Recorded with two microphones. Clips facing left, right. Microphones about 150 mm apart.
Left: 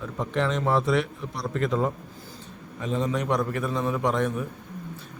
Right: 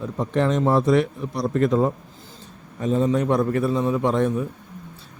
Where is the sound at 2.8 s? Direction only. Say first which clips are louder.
Right 6 dB; 40° right (ahead or behind).